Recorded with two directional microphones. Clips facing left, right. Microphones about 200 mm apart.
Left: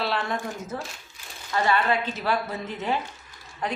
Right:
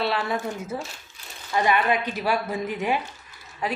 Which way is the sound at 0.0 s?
Centre (ahead or behind).